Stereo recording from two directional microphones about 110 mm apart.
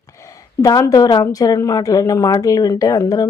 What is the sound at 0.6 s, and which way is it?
A woman's voice, 35° left (ahead or behind).